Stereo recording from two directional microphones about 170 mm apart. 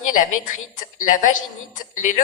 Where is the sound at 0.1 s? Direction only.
50° left (ahead or behind).